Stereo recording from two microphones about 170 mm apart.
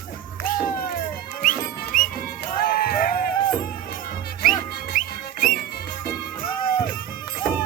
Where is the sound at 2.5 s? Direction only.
60° left (ahead or behind).